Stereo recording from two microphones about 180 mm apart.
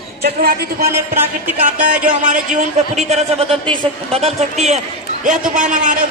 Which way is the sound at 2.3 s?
45° right (ahead or behind).